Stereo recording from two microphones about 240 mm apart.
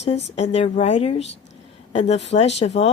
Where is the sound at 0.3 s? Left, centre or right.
Left.